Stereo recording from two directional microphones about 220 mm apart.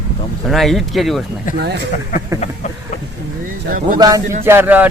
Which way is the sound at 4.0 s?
15° right (ahead or behind).